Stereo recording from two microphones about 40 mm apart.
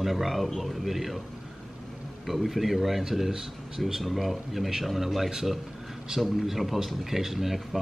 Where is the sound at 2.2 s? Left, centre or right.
Centre.